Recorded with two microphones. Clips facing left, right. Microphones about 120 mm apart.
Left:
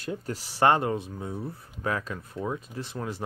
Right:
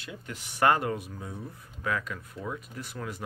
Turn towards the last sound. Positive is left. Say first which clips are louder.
# left 4 dB
turn(degrees=30)  # may be behind; listen again after turning